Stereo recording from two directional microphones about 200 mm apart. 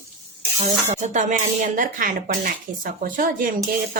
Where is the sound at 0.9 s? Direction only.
35° right (ahead or behind).